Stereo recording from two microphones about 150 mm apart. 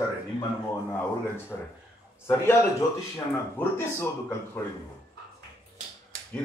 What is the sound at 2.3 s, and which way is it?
Speech, 15° left (ahead or behind).